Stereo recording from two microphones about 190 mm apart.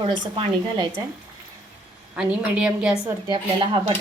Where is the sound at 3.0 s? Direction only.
25° right (ahead or behind).